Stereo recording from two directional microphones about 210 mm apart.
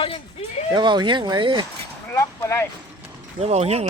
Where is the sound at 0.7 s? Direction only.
20° right (ahead or behind).